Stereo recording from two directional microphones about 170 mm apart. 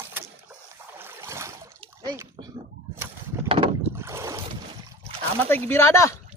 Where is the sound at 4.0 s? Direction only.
15° right (ahead or behind).